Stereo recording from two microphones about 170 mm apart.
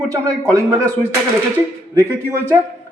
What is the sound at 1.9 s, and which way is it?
Speech, 15° right (ahead or behind).